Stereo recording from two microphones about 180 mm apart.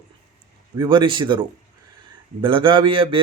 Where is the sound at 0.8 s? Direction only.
25° right (ahead or behind).